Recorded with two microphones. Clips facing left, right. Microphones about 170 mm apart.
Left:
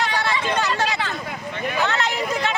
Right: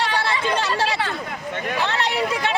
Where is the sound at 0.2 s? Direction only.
30° right (ahead or behind).